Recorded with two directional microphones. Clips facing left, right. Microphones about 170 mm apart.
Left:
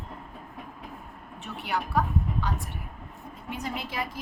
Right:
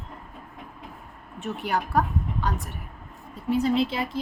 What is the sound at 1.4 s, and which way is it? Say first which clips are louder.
Speech: right 4 dB; 45° right (ahead or behind).